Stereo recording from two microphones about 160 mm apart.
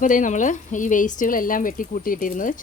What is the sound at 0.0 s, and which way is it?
Speech, 55° left (ahead or behind).